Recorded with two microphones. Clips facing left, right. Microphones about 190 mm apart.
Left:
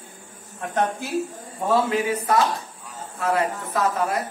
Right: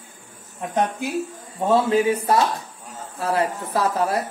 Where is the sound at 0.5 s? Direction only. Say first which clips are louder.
Right 1 dB; 15° right (ahead or behind).